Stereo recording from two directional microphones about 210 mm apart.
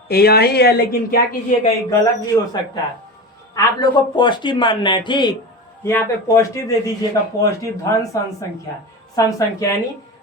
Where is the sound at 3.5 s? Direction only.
20° left (ahead or behind).